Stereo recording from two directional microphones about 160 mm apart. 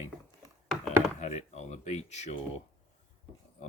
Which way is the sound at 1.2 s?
45° left (ahead or behind).